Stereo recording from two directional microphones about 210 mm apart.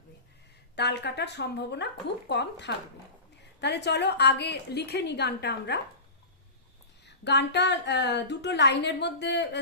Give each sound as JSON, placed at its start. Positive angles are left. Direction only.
{"t": 0.8, "sound": "a woman's voice", "side_deg": 55}
{"t": 7.0, "sound": "a woman's voice", "side_deg": 55}